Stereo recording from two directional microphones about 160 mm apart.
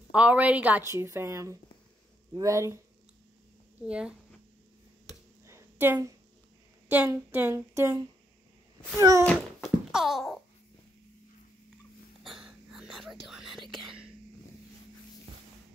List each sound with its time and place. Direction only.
0.1 s a woman's voice: 10° right (ahead or behind)
3.8 s a woman's voice: 5° right (ahead or behind)
5.5 s a sound: 15° right (ahead or behind)
6.9 s a woman's voice: 15° right (ahead or behind)
9.2 s a sound: 5° left (ahead or behind)
12.2 s whispering: centre (ahead or behind)